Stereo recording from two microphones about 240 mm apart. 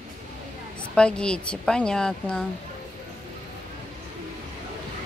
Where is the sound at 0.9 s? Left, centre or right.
Centre.